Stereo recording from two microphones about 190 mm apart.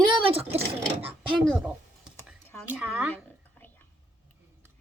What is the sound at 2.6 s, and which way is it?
Speech, 10° right (ahead or behind).